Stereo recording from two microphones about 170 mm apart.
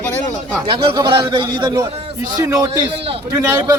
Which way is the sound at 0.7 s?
25° right (ahead or behind).